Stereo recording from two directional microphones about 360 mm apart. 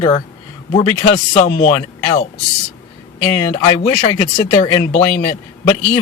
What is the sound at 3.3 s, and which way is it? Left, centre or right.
Speech, centre.